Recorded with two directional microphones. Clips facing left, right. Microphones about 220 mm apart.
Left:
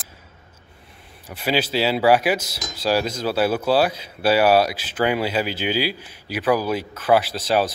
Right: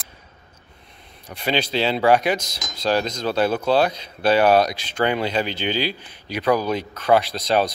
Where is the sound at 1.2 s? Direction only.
5° left (ahead or behind).